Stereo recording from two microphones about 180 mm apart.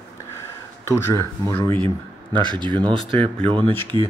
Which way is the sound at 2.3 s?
25° right (ahead or behind).